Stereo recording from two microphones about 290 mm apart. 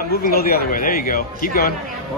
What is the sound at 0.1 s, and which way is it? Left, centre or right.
Speech, left.